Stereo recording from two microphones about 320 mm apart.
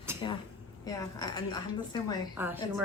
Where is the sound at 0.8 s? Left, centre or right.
Centre.